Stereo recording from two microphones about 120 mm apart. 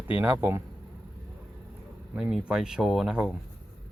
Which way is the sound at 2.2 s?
5° right (ahead or behind).